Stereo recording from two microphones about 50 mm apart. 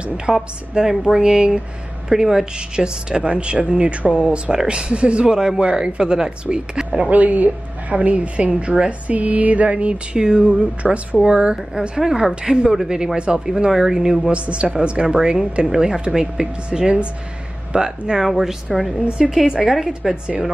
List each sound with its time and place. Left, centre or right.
0.0 s a woman's voice: centre
7.1 s a woman's voice: right; by 14.3 s centre
14.3 s a woman's voice: right; by 19.9 s centre